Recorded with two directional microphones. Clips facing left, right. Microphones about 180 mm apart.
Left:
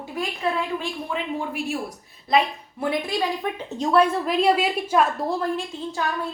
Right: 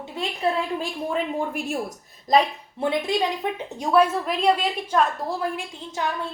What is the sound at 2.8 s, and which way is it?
Speech, 25° right (ahead or behind).